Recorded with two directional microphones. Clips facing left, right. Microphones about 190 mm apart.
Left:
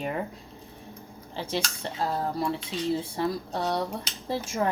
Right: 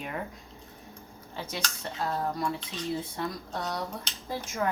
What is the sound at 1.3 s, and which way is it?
Speech, 30° left (ahead or behind).